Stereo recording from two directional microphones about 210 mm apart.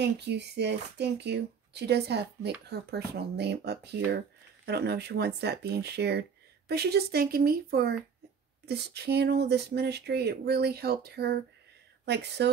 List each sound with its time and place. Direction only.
0.0 s speech: 55° right (ahead or behind)